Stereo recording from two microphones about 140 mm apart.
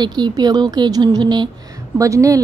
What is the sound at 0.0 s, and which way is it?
A woman's voice, 30° right (ahead or behind).